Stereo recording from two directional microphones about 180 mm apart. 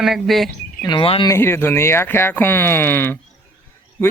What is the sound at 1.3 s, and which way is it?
Speech, 15° left (ahead or behind).